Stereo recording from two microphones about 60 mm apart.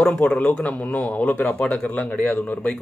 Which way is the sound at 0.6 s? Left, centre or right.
Left.